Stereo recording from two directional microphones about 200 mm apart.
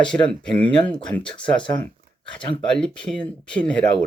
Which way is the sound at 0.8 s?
25° left (ahead or behind).